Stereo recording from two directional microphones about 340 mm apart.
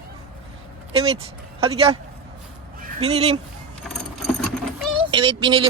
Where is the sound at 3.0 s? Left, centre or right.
Centre.